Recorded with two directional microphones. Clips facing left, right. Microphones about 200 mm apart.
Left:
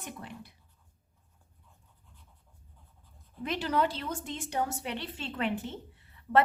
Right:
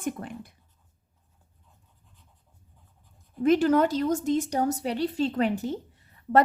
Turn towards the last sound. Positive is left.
turn(degrees=-40)  # may be behind; listen again after turning